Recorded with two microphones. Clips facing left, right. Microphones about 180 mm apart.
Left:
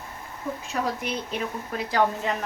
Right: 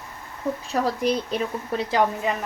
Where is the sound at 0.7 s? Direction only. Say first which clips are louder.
Right 6 dB; 35° right (ahead or behind).